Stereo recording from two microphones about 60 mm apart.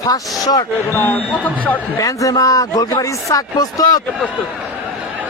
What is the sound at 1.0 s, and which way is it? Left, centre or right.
Speech, left.